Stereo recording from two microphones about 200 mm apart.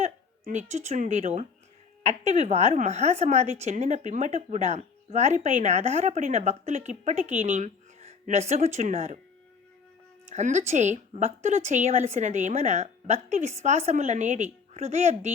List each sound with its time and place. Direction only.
0.0 s a woman's voice: 35° right (ahead or behind)
10.2 s a woman's voice: 35° right (ahead or behind)